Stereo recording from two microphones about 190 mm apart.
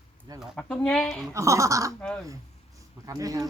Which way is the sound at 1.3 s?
15° right (ahead or behind).